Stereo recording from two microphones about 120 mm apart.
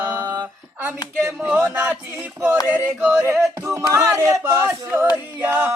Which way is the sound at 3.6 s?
25° right (ahead or behind).